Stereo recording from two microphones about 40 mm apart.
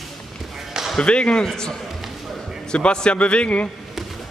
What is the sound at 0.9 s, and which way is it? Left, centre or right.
Speech, left.